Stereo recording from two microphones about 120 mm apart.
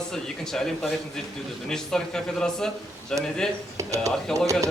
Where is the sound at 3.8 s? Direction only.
25° right (ahead or behind).